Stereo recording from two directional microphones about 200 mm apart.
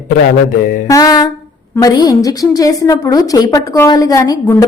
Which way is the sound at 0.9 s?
20° left (ahead or behind).